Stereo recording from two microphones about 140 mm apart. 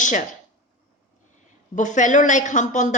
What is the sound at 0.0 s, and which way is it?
Speech, 65° left (ahead or behind).